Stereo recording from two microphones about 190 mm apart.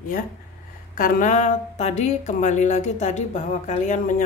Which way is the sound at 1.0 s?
45° left (ahead or behind).